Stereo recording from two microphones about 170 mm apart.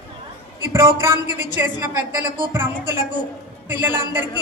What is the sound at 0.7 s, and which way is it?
Speech, 15° right (ahead or behind).